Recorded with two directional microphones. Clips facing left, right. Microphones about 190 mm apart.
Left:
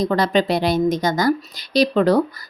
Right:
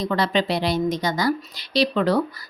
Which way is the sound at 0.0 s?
40° left (ahead or behind).